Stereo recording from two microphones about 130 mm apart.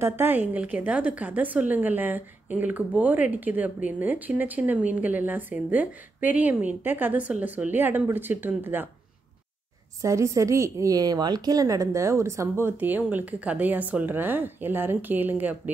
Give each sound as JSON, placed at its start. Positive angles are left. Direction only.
{"t": 0.0, "sound": "a woman's voice", "side_deg": -15}
{"t": 10.0, "sound": "a woman's voice", "side_deg": -25}